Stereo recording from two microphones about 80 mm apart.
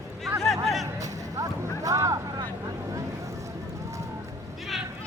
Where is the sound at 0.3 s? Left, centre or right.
Centre.